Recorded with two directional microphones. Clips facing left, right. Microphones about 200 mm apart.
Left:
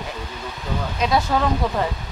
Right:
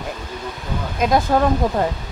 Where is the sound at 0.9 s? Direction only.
50° right (ahead or behind).